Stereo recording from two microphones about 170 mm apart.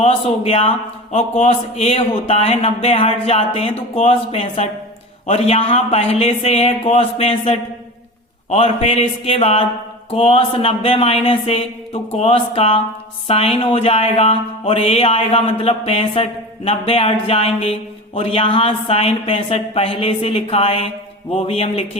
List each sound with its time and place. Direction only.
0.0 s speech: 35° left (ahead or behind)